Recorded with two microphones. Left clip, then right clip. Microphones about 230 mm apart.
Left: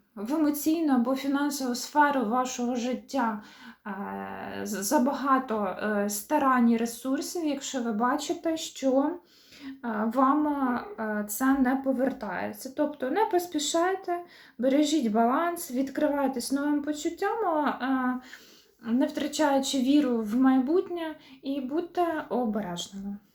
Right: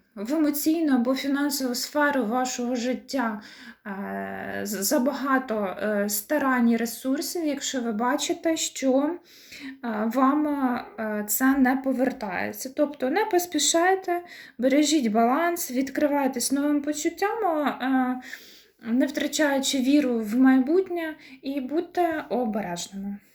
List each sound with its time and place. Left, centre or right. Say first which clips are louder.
0.2 s a woman's voice: right 2 dB; right
7.9 s a sound: right 1 dB; right
18.9 s a woman's voice: right 3 dB; right